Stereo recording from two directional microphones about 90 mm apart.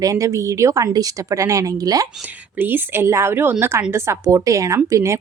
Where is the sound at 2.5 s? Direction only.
25° right (ahead or behind).